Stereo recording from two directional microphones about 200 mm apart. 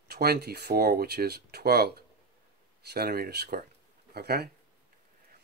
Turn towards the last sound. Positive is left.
turn(degrees=-50)  # may be behind; listen again after turning